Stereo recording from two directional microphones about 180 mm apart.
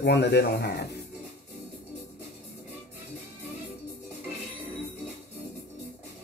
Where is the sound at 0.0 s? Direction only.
65° left (ahead or behind).